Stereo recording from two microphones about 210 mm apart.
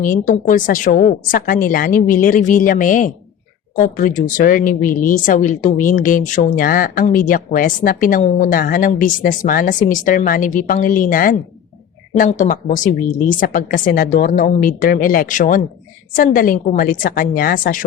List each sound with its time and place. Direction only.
0.0 s a woman's voice: 40° left (ahead or behind)